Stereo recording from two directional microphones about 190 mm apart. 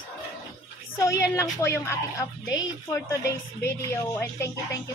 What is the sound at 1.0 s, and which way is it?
A woman's voice, 15° left (ahead or behind).